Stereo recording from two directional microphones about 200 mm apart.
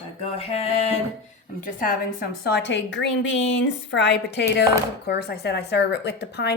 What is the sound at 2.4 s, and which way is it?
A woman's voice, 60° left (ahead or behind).